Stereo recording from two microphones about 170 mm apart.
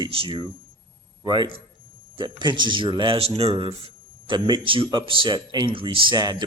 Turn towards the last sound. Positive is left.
turn(degrees=-25)  # may be behind; listen again after turning